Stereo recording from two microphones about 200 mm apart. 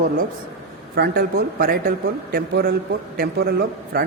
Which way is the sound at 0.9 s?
50° right (ahead or behind).